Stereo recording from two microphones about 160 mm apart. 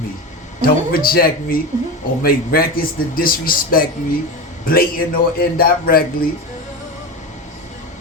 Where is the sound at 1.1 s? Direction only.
65° left (ahead or behind).